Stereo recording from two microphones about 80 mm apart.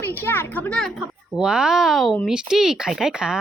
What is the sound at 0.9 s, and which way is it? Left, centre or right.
Speech, centre.